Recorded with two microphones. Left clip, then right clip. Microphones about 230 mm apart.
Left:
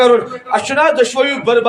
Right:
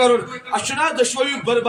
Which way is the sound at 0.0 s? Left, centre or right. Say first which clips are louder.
Left 5 dB; centre.